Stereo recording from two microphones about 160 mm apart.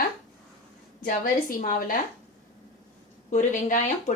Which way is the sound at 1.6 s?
55° left (ahead or behind).